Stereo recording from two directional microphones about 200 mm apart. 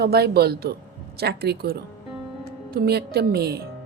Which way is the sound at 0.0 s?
50° right (ahead or behind).